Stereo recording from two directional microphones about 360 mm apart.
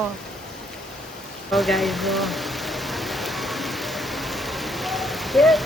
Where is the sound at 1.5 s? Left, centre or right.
Centre.